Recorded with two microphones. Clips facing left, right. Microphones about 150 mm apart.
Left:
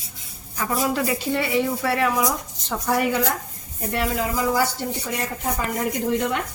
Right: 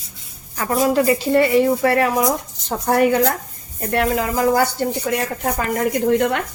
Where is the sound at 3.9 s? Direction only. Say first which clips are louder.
Right 5 dB; 65° right (ahead or behind).